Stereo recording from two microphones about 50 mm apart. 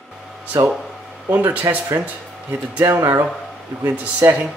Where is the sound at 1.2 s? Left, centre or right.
Right.